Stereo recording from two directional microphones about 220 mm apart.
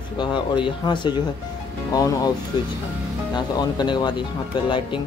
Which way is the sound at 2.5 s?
20° left (ahead or behind).